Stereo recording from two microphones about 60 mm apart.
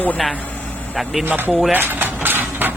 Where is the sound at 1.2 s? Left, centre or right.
Right.